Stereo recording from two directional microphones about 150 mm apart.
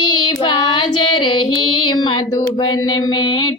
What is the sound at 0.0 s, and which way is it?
Child singing, 30° left (ahead or behind).